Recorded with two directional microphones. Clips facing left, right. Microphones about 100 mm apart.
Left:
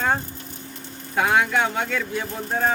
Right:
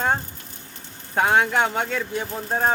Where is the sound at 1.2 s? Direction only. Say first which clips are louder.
Right 1 dB; 35° right (ahead or behind).